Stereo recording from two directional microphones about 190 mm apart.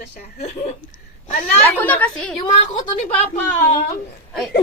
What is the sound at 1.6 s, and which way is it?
Speech, 10° left (ahead or behind).